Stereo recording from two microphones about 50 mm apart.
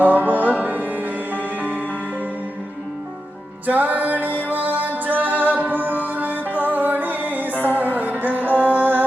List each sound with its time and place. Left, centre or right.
0.0 s music: right
3.7 s music: right
7.5 s music: left
7.9 s music: right
8.4 s music: left
8.7 s music: right